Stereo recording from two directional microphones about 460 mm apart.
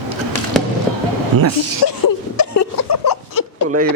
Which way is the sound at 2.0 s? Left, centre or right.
Left.